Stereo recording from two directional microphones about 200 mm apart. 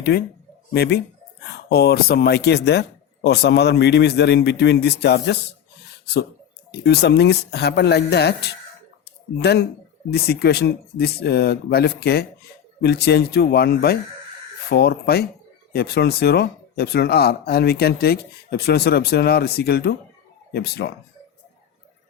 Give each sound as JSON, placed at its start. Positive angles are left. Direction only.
{"t": 0.1, "sound": "speech", "side_deg": 50}
{"t": 6.7, "sound": "speech", "side_deg": 55}